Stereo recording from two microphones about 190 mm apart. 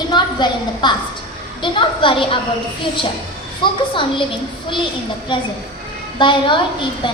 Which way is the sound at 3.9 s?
25° left (ahead or behind).